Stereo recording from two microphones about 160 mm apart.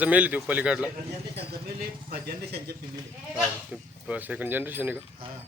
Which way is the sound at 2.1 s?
70° right (ahead or behind).